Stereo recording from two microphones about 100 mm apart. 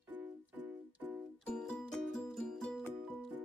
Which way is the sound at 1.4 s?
10° left (ahead or behind).